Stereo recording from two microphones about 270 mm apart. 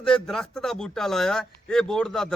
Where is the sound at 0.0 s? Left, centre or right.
Centre.